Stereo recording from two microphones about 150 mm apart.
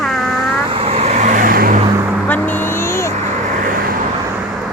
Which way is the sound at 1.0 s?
50° right (ahead or behind).